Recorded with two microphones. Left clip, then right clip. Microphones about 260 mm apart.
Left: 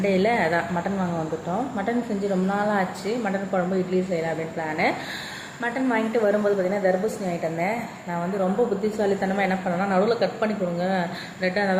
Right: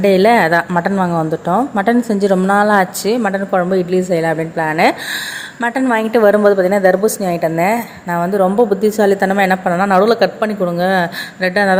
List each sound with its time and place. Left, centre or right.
0.0 s a woman's voice: right